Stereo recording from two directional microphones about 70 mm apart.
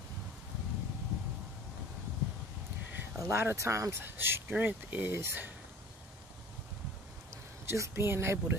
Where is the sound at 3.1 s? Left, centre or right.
Right.